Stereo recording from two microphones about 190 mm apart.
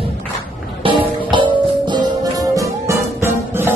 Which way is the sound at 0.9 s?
25° right (ahead or behind).